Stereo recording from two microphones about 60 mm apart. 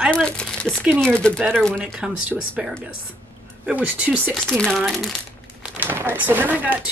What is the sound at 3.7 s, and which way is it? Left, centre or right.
Speech, right.